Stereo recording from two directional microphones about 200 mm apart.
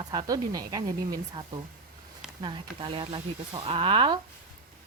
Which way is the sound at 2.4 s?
25° right (ahead or behind).